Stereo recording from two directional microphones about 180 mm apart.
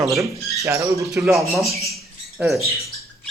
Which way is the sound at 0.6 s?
15° right (ahead or behind).